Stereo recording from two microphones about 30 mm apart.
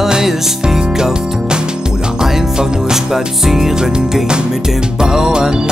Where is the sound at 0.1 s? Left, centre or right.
Centre.